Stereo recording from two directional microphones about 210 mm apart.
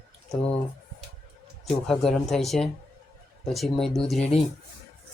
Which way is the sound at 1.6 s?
Centre (ahead or behind).